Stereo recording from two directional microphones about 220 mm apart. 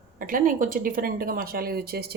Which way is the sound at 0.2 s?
40° right (ahead or behind).